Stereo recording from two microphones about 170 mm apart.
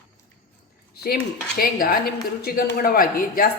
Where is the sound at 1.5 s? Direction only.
60° left (ahead or behind).